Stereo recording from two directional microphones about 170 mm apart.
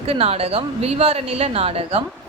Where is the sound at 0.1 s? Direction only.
35° right (ahead or behind).